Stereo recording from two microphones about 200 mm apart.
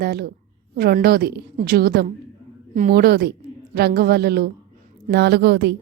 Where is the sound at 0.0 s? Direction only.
50° right (ahead or behind).